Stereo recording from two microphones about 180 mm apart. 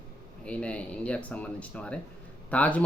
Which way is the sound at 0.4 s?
5° left (ahead or behind).